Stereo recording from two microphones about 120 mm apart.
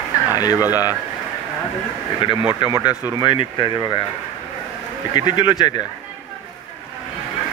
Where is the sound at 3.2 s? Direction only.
45° left (ahead or behind).